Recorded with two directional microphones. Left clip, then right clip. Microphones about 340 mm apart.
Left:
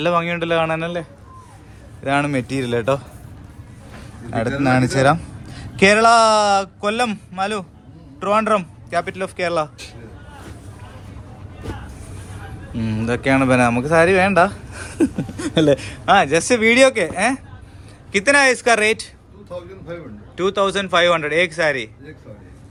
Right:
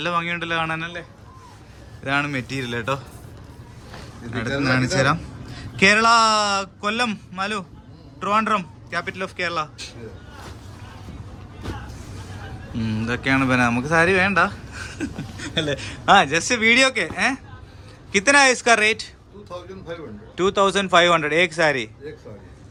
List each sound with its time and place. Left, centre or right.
0.0 s speech: centre
2.0 s speech: centre
4.3 s a man's voice: centre
12.7 s a man's voice: centre
20.3 s a man's voice: centre